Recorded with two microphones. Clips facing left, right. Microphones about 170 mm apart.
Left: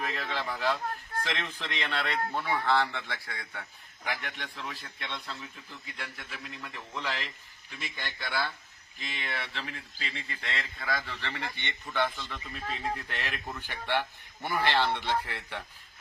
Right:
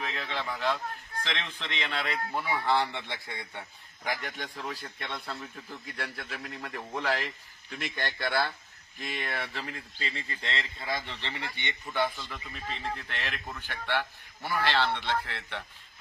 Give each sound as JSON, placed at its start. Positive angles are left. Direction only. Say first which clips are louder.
{"t": 0.0, "sound": "a man's voice", "louder": "left 1 dB", "side_deg": 0}
{"t": 4.0, "sound": "speech", "louder": "right 2 dB", "side_deg": -40}
{"t": 6.4, "sound": "a man's voice", "louder": "right 4 dB", "side_deg": -60}
{"t": 12.1, "sound": "a man's voice", "louder": "left 1 dB", "side_deg": 0}